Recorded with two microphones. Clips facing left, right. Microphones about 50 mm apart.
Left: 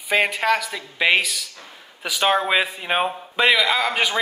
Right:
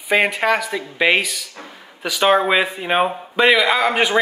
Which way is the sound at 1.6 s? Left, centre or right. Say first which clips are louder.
Right 6 dB; right.